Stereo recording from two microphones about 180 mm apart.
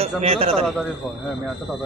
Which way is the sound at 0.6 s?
Centre (ahead or behind).